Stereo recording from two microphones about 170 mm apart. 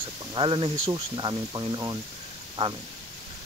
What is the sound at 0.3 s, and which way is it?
Speech, 30° right (ahead or behind).